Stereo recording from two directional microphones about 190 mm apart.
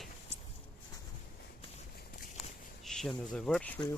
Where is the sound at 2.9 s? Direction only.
5° left (ahead or behind).